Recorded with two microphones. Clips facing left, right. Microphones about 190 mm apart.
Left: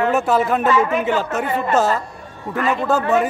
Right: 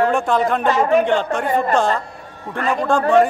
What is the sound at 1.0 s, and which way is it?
Speech, 5° left (ahead or behind).